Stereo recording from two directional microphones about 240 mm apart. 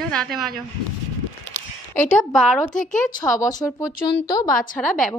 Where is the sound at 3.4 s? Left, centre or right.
Centre.